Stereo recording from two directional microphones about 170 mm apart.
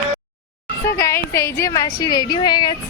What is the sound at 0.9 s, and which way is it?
A woman's voice, 15° left (ahead or behind).